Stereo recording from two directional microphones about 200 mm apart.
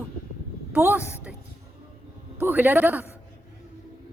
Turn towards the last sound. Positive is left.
turn(degrees=-10)  # may be behind; listen again after turning